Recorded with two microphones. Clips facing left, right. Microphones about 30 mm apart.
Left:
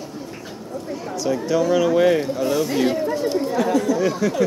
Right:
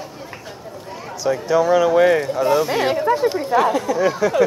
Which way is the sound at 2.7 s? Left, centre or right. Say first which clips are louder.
Right 3 dB; right.